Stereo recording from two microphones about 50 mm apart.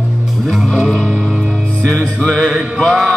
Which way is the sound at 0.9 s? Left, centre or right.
Right.